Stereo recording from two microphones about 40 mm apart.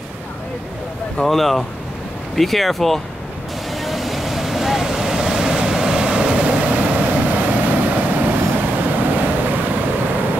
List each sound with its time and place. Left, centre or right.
1.2 s speech: centre
3.7 s vehicle: centre; by 9.7 s right